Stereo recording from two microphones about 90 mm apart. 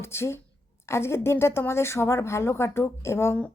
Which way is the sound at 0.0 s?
30° left (ahead or behind).